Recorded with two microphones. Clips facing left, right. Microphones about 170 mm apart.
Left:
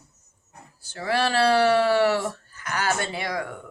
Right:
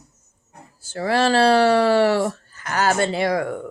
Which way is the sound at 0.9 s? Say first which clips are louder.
Right 5 dB; 45° right (ahead or behind).